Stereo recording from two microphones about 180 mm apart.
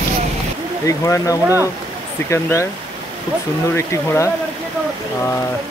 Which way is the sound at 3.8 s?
15° left (ahead or behind).